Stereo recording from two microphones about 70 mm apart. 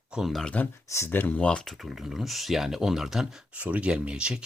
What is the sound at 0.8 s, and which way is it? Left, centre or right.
Speech, left.